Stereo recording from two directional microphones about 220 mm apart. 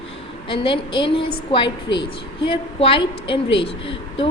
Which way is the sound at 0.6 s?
25° left (ahead or behind).